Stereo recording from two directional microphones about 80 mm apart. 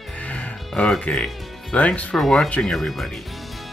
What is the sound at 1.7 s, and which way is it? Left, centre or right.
Speech, centre.